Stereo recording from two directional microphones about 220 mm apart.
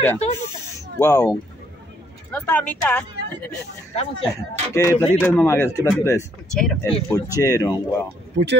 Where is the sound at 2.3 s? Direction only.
5° left (ahead or behind).